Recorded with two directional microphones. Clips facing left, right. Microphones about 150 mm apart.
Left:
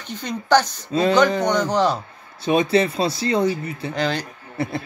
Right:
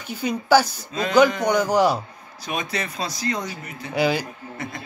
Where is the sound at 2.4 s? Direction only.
30° left (ahead or behind).